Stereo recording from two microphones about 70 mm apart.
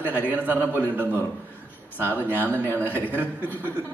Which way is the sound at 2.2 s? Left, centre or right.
Right.